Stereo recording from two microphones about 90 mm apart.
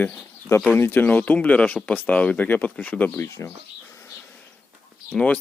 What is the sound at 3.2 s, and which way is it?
Speech, 30° left (ahead or behind).